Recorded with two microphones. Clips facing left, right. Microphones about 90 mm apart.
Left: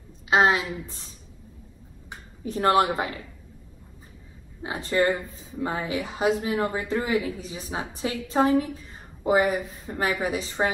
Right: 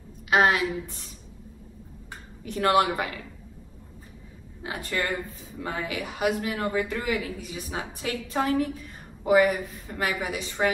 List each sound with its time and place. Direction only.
0.3 s a man's voice: 25° left (ahead or behind)
2.4 s a woman's voice: 35° left (ahead or behind)
4.6 s a man's voice: 30° left (ahead or behind)